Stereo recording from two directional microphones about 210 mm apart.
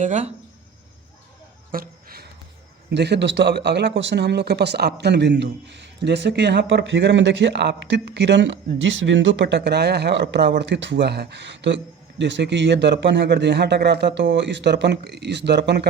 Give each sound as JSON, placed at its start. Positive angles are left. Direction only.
{"t": 0.0, "sound": "speech", "side_deg": -35}
{"t": 1.7, "sound": "a sound", "side_deg": -45}
{"t": 2.9, "sound": "speech", "side_deg": -55}